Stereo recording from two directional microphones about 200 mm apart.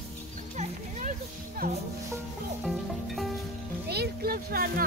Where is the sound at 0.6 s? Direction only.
40° right (ahead or behind).